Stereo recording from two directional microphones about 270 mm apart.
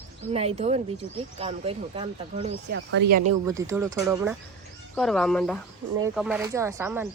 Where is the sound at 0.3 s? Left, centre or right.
Right.